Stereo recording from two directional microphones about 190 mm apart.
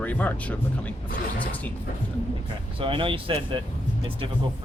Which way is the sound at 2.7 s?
25° right (ahead or behind).